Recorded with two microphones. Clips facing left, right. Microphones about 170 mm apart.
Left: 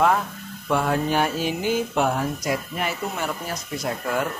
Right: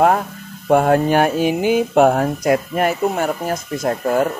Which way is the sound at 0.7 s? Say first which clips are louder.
Right 9 dB; 50° right (ahead or behind).